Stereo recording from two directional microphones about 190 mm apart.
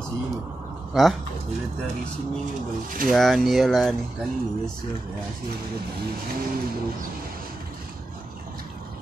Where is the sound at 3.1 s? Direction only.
Centre (ahead or behind).